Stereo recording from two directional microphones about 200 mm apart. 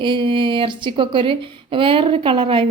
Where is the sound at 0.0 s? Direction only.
25° right (ahead or behind).